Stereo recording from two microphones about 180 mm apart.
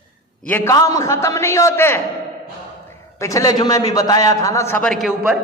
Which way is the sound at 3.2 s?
20° left (ahead or behind).